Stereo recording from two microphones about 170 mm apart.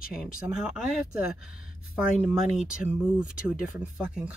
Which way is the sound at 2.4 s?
45° left (ahead or behind).